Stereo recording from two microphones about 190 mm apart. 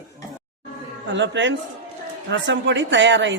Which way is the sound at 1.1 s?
70° right (ahead or behind).